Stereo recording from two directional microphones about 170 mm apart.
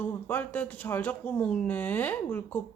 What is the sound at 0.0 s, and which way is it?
Speech, 10° left (ahead or behind).